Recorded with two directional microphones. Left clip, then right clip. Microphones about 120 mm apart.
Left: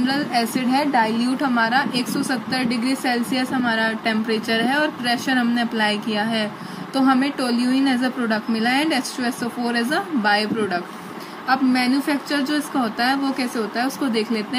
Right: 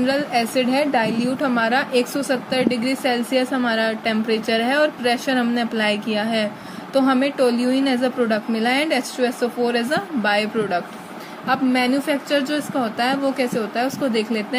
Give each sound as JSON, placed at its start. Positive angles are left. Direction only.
{"t": 0.0, "sound": "a woman's voice", "side_deg": -55}